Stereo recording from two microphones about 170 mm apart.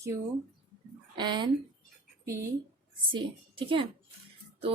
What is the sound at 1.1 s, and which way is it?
Speech, 25° right (ahead or behind).